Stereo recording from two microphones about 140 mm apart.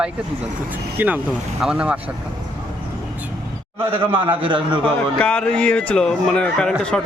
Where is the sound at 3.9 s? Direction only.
40° right (ahead or behind).